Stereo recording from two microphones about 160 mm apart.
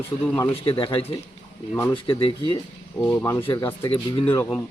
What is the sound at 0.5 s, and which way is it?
Speech, 35° left (ahead or behind).